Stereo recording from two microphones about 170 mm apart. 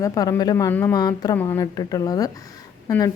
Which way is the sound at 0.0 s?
20° left (ahead or behind).